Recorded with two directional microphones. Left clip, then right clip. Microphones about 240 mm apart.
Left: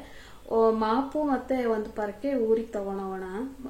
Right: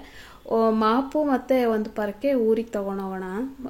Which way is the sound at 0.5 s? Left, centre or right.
Right.